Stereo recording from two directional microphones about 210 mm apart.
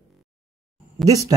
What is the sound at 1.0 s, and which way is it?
Speech, 15° right (ahead or behind).